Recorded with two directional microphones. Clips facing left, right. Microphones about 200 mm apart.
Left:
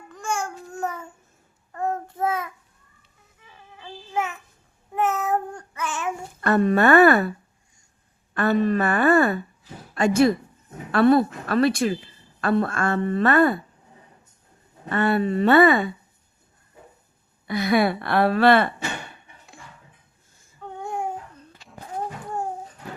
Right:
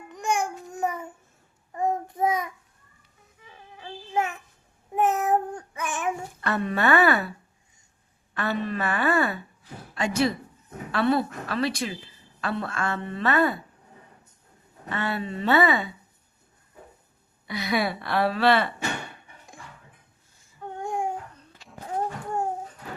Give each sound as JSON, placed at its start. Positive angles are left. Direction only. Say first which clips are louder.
{"t": 0.1, "sound": "babbling", "louder": "right 2 dB", "side_deg": -20}
{"t": 1.7, "sound": "child singing", "louder": "right 1 dB", "side_deg": -15}
{"t": 4.1, "sound": "child singing", "louder": "even", "side_deg": -15}
{"t": 6.4, "sound": "speech", "louder": "left 7 dB", "side_deg": 45}
{"t": 14.8, "sound": "speech", "louder": "left 8 dB", "side_deg": 50}
{"t": 17.4, "sound": "speech", "louder": "left 6 dB", "side_deg": 50}
{"t": 21.6, "sound": "a sound", "louder": "even", "side_deg": 0}